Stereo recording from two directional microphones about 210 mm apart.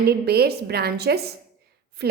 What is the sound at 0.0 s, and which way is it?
A woman's voice, 50° right (ahead or behind).